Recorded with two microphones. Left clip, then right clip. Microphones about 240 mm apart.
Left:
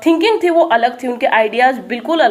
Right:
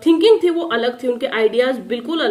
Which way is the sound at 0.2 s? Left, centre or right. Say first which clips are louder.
Left 2 dB; centre.